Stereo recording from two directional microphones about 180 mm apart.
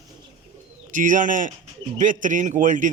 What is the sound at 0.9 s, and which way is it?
A man's voice, 45° right (ahead or behind).